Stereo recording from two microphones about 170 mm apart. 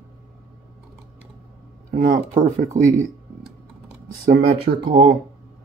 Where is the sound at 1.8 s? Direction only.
60° right (ahead or behind).